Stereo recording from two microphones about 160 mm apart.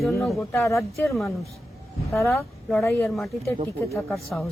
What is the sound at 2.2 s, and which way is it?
Speech, 15° left (ahead or behind).